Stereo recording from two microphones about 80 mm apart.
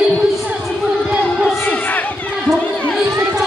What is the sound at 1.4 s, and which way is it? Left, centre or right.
Crowd, left.